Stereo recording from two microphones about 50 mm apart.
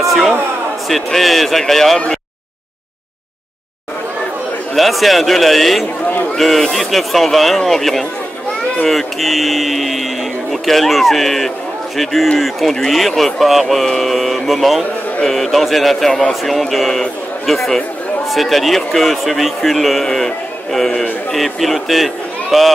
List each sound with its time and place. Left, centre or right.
0.0 s a sound: centre
0.8 s a man's voice: centre
4.7 s a man's voice: centre